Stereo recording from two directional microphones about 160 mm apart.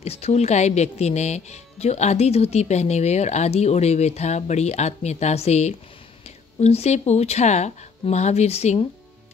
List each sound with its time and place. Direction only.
0.0 s speech: 40° left (ahead or behind)